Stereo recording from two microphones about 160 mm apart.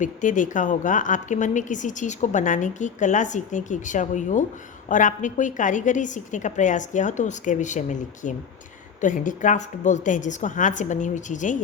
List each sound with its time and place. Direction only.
0.0 s a woman's voice: 50° left (ahead or behind)